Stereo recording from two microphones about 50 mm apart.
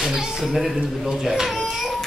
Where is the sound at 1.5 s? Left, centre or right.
Centre.